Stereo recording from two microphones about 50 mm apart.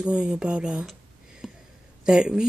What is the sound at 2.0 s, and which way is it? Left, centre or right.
Speech, centre.